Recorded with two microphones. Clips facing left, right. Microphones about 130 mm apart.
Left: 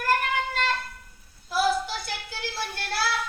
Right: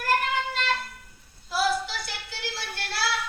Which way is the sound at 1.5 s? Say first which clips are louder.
Left 2 dB; 50° left (ahead or behind).